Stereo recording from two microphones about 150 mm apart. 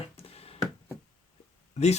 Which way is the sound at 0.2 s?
40° left (ahead or behind).